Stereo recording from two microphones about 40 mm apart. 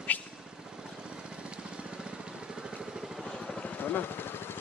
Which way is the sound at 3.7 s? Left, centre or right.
Left.